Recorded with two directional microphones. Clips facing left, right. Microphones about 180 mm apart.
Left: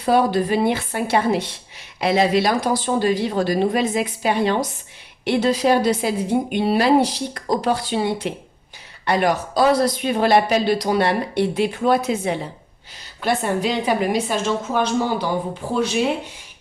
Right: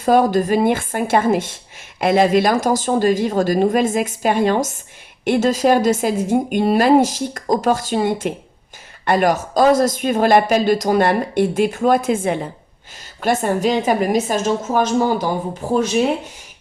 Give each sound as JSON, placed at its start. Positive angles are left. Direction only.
{"t": 0.0, "sound": "speech", "side_deg": -45}